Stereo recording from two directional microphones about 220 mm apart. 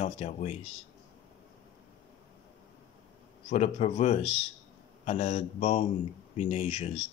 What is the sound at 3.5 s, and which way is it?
Speech, 30° left (ahead or behind).